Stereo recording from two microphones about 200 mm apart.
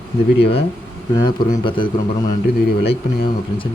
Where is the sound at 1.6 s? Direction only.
25° left (ahead or behind).